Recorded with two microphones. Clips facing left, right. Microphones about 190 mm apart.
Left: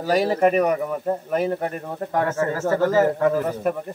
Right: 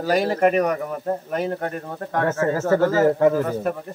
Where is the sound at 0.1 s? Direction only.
5° left (ahead or behind).